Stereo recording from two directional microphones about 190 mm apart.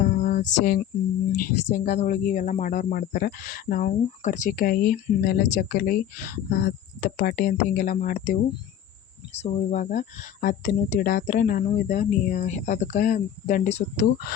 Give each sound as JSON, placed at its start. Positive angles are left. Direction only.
{"t": 0.0, "sound": "a sound", "side_deg": 45}
{"t": 1.4, "sound": "speech", "side_deg": 55}
{"t": 2.0, "sound": "speech", "side_deg": 40}